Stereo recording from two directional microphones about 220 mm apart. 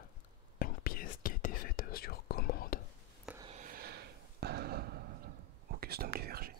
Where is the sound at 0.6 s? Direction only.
40° left (ahead or behind).